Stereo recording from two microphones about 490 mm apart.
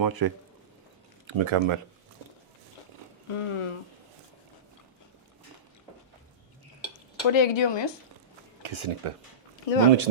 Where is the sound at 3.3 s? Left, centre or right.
Left.